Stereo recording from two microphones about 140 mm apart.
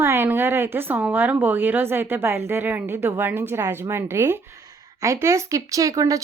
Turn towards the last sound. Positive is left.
turn(degrees=-25)  # may be behind; listen again after turning